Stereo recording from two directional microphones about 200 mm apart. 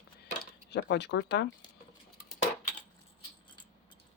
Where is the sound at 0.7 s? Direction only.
60° left (ahead or behind).